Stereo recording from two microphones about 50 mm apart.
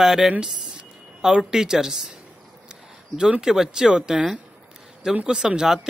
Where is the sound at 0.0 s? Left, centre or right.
Centre.